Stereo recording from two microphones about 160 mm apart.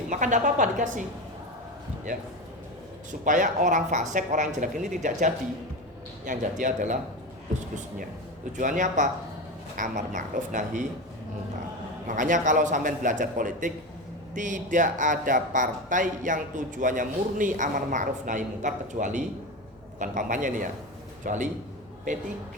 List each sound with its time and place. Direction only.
0.1 s speech: 50° right (ahead or behind)
2.1 s speech: 55° right (ahead or behind)
8.5 s speech: 55° right (ahead or behind)
12.0 s a man's voice: 55° right (ahead or behind)